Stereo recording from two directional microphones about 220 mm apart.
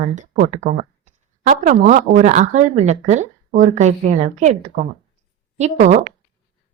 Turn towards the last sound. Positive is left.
turn(degrees=-30)  # may be behind; listen again after turning